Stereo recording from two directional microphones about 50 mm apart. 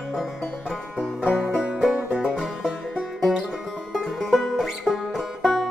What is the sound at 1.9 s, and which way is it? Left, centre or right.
Music, centre.